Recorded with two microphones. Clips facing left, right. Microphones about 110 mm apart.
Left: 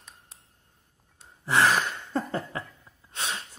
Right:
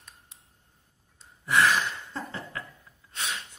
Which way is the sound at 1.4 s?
30° left (ahead or behind).